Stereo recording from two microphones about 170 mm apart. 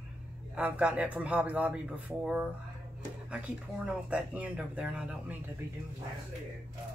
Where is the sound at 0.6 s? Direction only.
10° right (ahead or behind).